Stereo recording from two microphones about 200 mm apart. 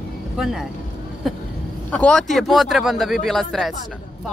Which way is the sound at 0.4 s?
Centre (ahead or behind).